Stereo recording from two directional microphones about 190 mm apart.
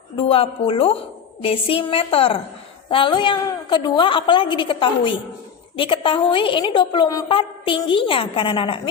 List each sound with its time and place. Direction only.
0.2 s a woman's voice: 30° left (ahead or behind)